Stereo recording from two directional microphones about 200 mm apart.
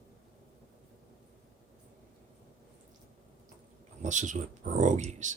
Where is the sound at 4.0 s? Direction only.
35° right (ahead or behind).